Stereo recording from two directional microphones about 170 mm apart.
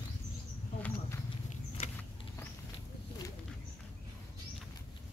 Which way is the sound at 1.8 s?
35° left (ahead or behind).